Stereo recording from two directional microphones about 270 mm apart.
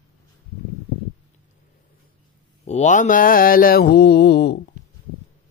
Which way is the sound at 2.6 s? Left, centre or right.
Left.